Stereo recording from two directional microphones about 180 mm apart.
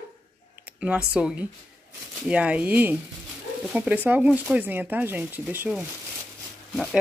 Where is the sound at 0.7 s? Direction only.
5° right (ahead or behind).